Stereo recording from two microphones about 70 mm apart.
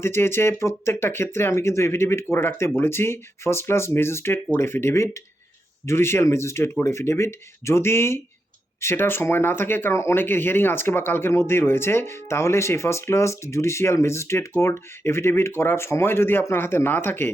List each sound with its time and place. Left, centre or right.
0.0 s speech: left
9.9 s speech: left